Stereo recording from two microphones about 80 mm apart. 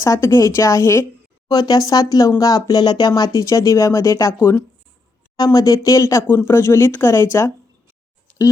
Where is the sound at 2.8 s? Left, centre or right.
Left.